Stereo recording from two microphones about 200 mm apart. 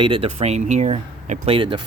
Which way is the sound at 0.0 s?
25° right (ahead or behind).